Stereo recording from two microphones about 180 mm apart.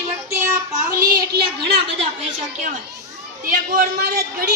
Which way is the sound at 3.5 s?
55° right (ahead or behind).